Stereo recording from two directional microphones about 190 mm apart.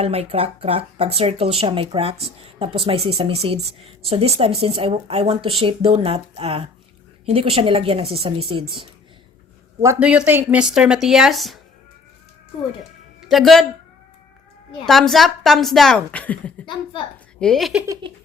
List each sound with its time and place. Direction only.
0.0 s speech: 30° right (ahead or behind)
9.8 s speech: 10° right (ahead or behind)
13.2 s a woman's voice: centre (ahead or behind)
14.8 s speech: centre (ahead or behind)
17.4 s speech: centre (ahead or behind)
17.8 s speech: 20° right (ahead or behind)